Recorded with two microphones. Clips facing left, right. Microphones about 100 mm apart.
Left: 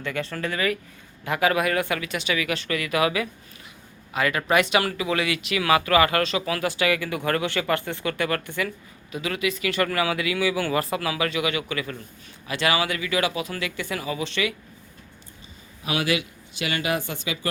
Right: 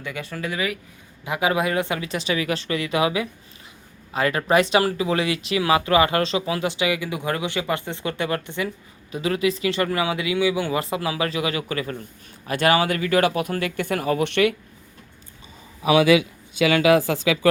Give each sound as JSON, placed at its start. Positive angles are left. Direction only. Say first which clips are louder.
{"t": 0.0, "sound": "speech", "louder": "left 2 dB", "side_deg": -10}
{"t": 17.3, "sound": "speech", "louder": "right 9 dB", "side_deg": -90}